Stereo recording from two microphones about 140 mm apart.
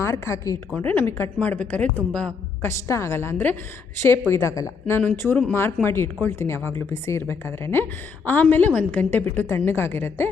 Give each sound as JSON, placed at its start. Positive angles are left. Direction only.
{"t": 0.0, "sound": "a woman's voice", "side_deg": 20}